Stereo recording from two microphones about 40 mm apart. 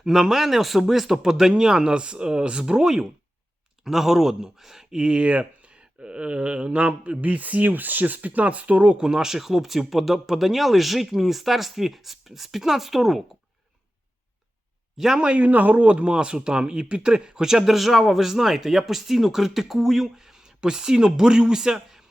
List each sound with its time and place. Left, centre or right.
0.0 s speech: centre
5.0 s speech: right
6.0 s a sound: right
6.7 s a man's voice: right
7.2 s speech: right; by 13.2 s centre
14.9 s speech: centre
15.4 s a man's voice: right
15.9 s speech: right